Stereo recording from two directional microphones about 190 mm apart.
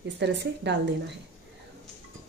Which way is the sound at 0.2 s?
65° right (ahead or behind).